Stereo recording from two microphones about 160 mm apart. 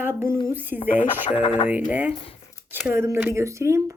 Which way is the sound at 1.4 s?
45° left (ahead or behind).